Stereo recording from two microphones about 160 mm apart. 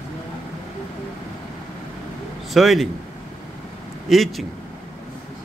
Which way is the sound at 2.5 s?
Centre (ahead or behind).